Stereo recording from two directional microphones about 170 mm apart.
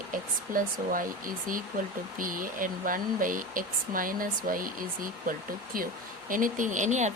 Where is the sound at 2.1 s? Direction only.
55° right (ahead or behind).